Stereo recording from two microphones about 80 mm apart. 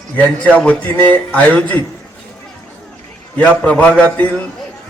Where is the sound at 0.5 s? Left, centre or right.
Centre.